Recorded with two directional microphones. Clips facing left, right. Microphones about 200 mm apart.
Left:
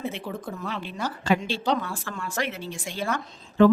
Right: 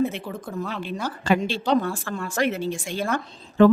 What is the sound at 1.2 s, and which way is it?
Speech, 50° right (ahead or behind).